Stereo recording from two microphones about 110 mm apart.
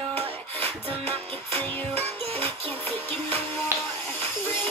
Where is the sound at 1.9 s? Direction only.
65° right (ahead or behind).